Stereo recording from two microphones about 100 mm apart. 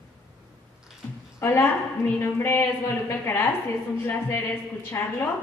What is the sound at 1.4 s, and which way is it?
A woman's voice, 25° left (ahead or behind).